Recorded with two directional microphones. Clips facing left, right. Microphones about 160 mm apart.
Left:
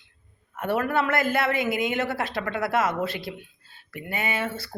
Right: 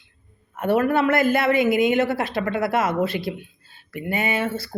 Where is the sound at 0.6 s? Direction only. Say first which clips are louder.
Right 5 dB; 20° right (ahead or behind).